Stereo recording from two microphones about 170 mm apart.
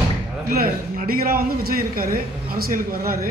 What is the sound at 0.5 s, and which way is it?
A man's voice, 60° right (ahead or behind).